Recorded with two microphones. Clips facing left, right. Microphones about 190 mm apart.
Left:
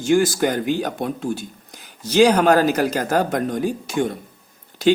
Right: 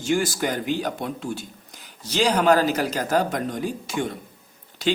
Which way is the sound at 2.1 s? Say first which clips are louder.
Left 5 dB; 50° left (ahead or behind).